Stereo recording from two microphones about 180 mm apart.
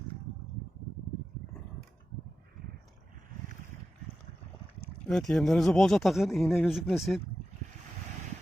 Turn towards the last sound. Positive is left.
turn(degrees=0)  # may be behind; listen again after turning